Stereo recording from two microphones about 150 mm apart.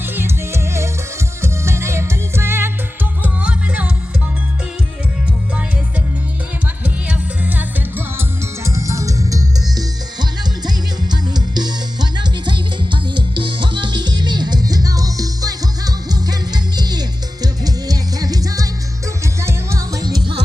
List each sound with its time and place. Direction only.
0.0 s music: 15° right (ahead or behind)
6.8 s music: 10° right (ahead or behind)
10.7 s music: 30° right (ahead or behind)